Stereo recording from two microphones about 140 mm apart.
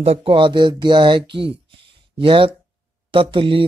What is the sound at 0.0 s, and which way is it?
Speech, 45° right (ahead or behind).